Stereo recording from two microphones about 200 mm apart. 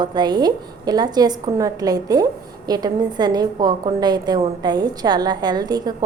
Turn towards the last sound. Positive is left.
turn(degrees=-20)  # may be behind; listen again after turning